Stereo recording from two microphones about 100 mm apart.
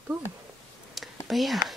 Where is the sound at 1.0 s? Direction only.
Centre (ahead or behind).